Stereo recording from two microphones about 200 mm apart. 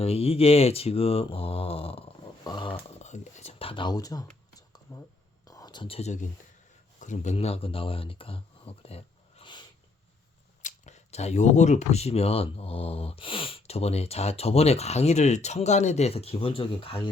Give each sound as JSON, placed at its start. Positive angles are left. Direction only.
{"t": 0.0, "sound": "speech", "side_deg": 30}
{"t": 5.5, "sound": "whispering", "side_deg": 20}
{"t": 7.0, "sound": "speech", "side_deg": 35}
{"t": 10.6, "sound": "speech", "side_deg": 35}